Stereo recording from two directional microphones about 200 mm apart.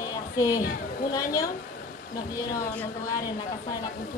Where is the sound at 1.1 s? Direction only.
15° left (ahead or behind).